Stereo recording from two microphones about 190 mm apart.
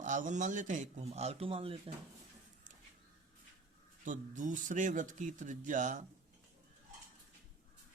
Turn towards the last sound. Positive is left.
turn(degrees=-40)  # may be behind; listen again after turning